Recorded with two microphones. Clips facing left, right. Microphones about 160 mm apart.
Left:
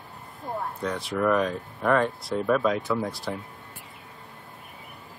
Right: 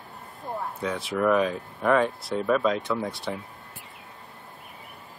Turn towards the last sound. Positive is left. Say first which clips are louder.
# left 1 dB
turn(degrees=0)  # may be behind; listen again after turning